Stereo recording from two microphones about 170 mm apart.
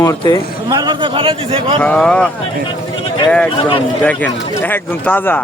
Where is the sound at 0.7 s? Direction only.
25° right (ahead or behind).